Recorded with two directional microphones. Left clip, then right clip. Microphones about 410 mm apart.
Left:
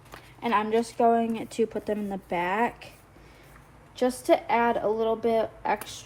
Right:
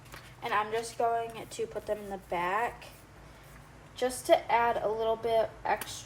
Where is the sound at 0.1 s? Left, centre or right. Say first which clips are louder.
Left 6 dB; left.